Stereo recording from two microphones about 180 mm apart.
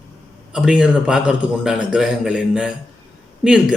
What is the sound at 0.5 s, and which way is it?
Speech, 5° right (ahead or behind).